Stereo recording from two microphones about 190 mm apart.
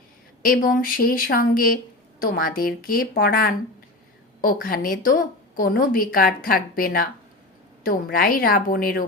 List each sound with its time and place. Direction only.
0.4 s a woman's voice: 50° left (ahead or behind)
4.6 s a woman's voice: 50° left (ahead or behind)